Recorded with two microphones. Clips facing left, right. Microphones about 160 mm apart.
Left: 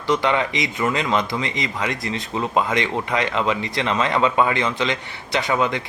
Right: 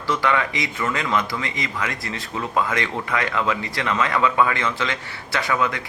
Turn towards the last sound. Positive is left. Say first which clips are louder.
# left 2 dB
turn(degrees=25)  # may be behind; listen again after turning